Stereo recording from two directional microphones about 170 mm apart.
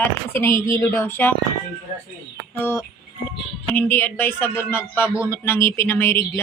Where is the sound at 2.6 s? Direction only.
15° left (ahead or behind).